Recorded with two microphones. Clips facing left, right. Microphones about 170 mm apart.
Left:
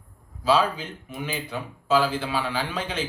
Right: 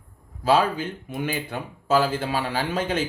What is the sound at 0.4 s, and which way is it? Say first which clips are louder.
Speech: right 2 dB; 50° right (ahead or behind).